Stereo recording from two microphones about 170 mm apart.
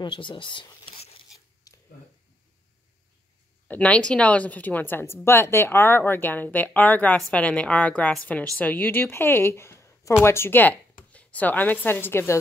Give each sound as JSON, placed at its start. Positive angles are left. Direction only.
{"t": 0.0, "sound": "speech", "side_deg": 30}
{"t": 1.7, "sound": "a sound", "side_deg": 20}
{"t": 3.6, "sound": "a woman's voice", "side_deg": 10}